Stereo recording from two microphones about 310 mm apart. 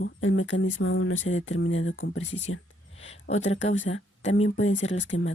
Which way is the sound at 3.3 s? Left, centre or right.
Left.